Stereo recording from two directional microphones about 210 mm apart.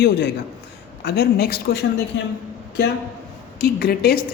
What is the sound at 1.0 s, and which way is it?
Speech, 50° left (ahead or behind).